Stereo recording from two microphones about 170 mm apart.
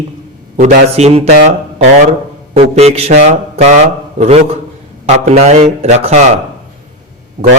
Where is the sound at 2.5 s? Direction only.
35° right (ahead or behind).